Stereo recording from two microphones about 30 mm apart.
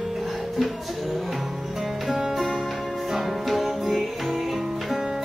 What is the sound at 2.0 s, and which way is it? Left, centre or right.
Music, centre.